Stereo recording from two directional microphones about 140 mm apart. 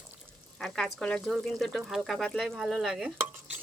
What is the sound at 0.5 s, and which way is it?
Speech, 5° left (ahead or behind).